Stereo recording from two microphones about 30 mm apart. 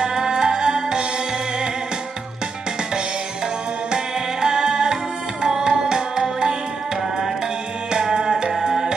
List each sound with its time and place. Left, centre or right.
0.0 s music: right
3.9 s music: right
7.9 s music: right
8.6 s tabla: right